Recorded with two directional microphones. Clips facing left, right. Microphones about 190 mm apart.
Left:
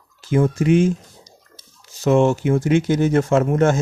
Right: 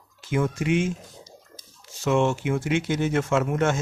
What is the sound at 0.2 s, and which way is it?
Speech, 35° left (ahead or behind).